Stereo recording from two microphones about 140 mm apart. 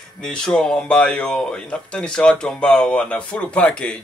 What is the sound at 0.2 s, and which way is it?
A man's voice, 5° left (ahead or behind).